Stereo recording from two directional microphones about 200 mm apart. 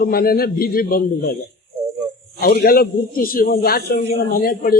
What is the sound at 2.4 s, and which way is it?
A man's voice, 50° left (ahead or behind).